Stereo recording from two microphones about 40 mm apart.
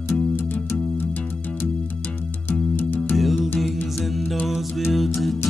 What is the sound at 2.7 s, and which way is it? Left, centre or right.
Music, left.